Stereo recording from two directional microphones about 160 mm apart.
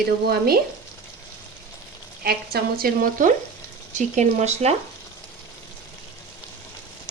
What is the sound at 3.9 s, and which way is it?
Speech, 45° right (ahead or behind).